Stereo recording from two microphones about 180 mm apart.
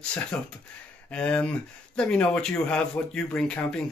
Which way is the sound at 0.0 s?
5° left (ahead or behind).